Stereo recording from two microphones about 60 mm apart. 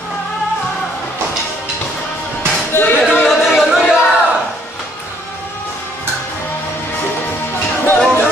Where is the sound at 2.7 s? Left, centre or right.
Left.